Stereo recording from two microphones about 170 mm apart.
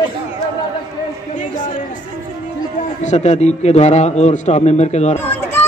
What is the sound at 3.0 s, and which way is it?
A man's voice, 40° left (ahead or behind).